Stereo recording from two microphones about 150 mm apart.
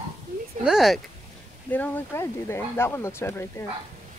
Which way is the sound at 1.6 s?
10° left (ahead or behind).